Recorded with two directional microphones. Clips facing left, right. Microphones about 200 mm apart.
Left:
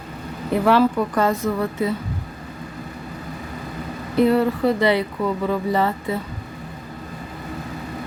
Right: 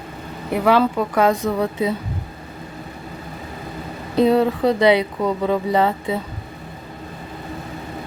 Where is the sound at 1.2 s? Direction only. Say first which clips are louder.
Right 4 dB; 15° right (ahead or behind).